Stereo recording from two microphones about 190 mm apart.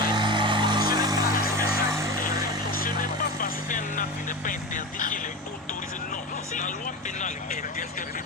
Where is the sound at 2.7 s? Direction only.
50° left (ahead or behind).